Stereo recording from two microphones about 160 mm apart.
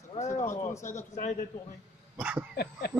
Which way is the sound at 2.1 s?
10° right (ahead or behind).